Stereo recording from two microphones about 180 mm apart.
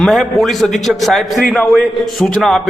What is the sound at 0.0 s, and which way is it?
A man's voice, centre (ahead or behind).